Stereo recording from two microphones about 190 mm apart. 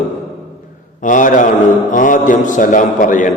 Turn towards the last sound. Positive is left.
turn(degrees=45)  # may be behind; listen again after turning